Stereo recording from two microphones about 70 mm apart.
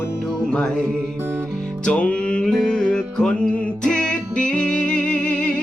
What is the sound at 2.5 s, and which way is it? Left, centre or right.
Music, centre.